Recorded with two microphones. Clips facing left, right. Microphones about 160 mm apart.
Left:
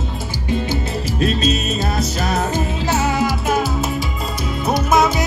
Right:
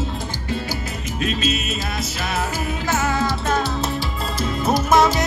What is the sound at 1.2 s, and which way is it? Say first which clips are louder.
Music: left 4 dB; 35° left (ahead or behind).